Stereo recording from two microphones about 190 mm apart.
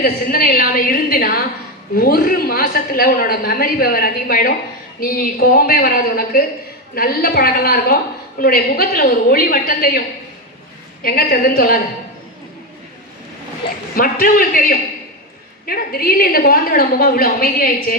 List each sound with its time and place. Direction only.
0.0 s a woman's voice: 50° left (ahead or behind)
11.0 s a woman's voice: 55° left (ahead or behind)
13.9 s a woman's voice: 50° left (ahead or behind)